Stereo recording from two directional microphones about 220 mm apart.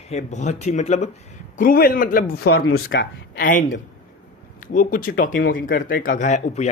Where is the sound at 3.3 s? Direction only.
40° left (ahead or behind).